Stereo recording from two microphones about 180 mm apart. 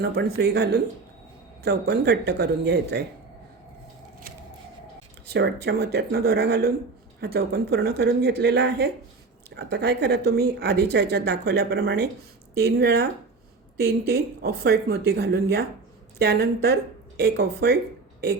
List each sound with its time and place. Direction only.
0.0 s a woman's voice: 60° right (ahead or behind)
5.2 s a woman's voice: 65° right (ahead or behind)